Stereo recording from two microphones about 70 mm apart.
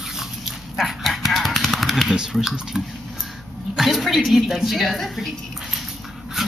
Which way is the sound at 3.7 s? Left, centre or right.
Centre.